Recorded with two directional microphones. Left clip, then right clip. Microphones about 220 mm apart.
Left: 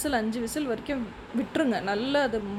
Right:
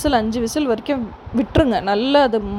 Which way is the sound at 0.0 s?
25° right (ahead or behind).